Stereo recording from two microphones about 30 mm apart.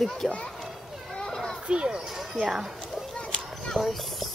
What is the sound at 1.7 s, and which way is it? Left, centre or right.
Speech, right.